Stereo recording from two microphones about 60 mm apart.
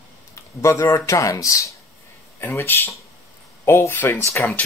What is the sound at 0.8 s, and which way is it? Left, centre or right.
Speech, left.